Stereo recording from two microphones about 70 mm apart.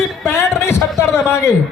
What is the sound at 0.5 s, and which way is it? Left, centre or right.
A man's voice, left.